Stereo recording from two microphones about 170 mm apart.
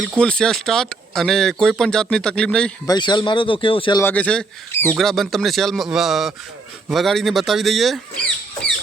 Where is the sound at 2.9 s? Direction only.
25° left (ahead or behind).